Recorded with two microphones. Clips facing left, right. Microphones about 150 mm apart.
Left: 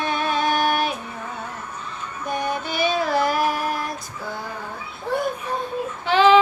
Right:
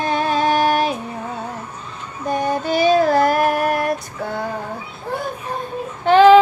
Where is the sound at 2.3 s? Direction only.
40° right (ahead or behind); by 4.5 s 60° right (ahead or behind).